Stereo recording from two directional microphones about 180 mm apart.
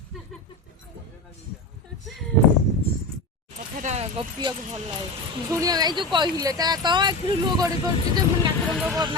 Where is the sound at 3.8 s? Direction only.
40° right (ahead or behind).